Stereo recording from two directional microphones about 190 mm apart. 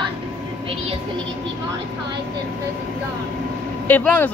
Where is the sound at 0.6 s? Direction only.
30° right (ahead or behind).